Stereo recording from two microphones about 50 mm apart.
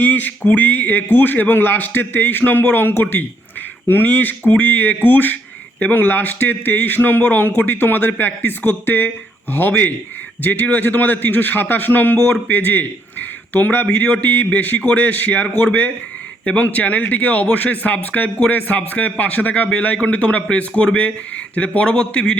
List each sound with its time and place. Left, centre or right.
0.0 s a man's voice: left